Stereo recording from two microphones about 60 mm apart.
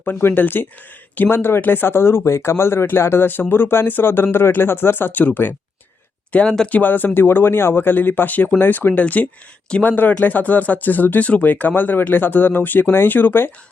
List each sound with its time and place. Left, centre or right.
0.0 s speech: left
6.3 s speech: centre; by 13.5 s left